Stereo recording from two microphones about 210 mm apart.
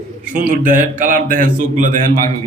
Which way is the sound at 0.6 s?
40° right (ahead or behind).